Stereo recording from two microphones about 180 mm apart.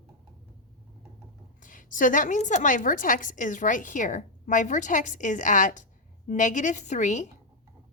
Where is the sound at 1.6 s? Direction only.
45° left (ahead or behind).